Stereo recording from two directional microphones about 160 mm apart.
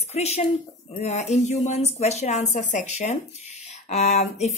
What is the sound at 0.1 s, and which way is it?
A woman's voice, 40° left (ahead or behind).